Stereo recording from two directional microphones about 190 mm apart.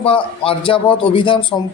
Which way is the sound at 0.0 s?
30° left (ahead or behind).